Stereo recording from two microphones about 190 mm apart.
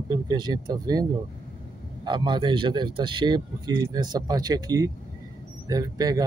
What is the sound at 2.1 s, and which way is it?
Speech, 25° right (ahead or behind).